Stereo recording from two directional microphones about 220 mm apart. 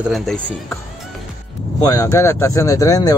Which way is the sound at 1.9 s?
15° left (ahead or behind).